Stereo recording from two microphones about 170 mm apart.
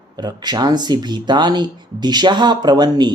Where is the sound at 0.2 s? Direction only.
25° right (ahead or behind).